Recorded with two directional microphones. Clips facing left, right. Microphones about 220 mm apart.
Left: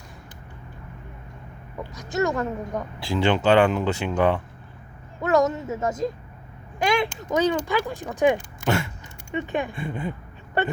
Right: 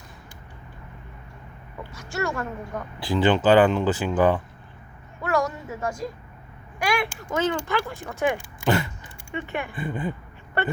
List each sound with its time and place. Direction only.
1.9 s speech: 20° left (ahead or behind)
3.0 s speech: centre (ahead or behind)
5.2 s speech: 20° left (ahead or behind)
8.6 s a sound: centre (ahead or behind)
9.3 s speech: 15° left (ahead or behind)
9.7 s speech: 5° right (ahead or behind)